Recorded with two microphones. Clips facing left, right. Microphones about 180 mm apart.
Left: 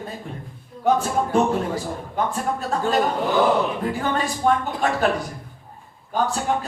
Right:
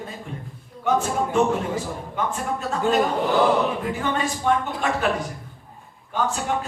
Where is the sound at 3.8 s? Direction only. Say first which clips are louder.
Left 1 dB; 35° left (ahead or behind).